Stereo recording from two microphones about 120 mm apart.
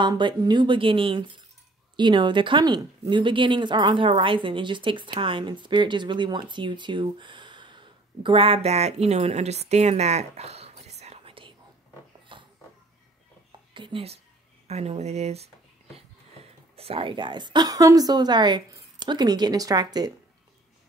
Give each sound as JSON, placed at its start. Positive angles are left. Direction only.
{"t": 0.0, "sound": "a woman's voice", "side_deg": -40}
{"t": 8.6, "sound": "speech", "side_deg": -65}
{"t": 12.3, "sound": "a sound", "side_deg": -45}
{"t": 13.7, "sound": "speech", "side_deg": -45}
{"t": 14.7, "sound": "a woman's voice", "side_deg": -65}